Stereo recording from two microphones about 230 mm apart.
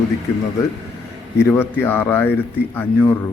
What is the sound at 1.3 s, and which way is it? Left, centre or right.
A man's voice, centre.